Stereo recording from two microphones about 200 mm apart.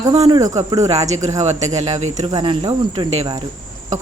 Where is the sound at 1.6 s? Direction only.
35° right (ahead or behind).